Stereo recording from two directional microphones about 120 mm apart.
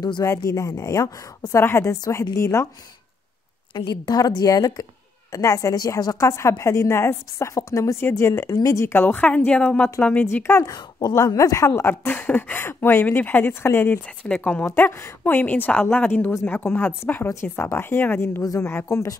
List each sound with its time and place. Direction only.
0.2 s a woman's voice: 25° left (ahead or behind)
3.7 s a woman's voice: 35° left (ahead or behind); by 10.6 s 20° left (ahead or behind)
10.6 s speech: 35° left (ahead or behind); by 14.7 s 10° left (ahead or behind)
14.7 s a woman's voice: 25° left (ahead or behind)